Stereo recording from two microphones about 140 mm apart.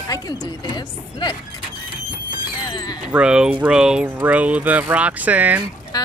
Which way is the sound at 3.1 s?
5° right (ahead or behind).